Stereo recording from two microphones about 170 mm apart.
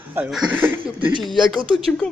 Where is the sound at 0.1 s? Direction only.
5° right (ahead or behind).